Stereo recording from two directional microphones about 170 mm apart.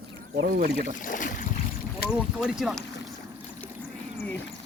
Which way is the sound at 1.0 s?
50° left (ahead or behind).